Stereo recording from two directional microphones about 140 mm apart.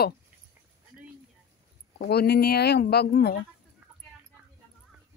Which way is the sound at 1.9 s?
90° left.